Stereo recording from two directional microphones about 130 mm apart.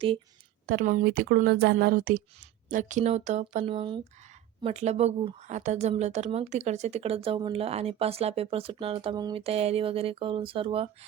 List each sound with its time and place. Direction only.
0.7 s speech: 90° right
2.6 s speech: 80° right; by 4.0 s 45° right (ahead or behind)
4.6 s speech: 55° right (ahead or behind)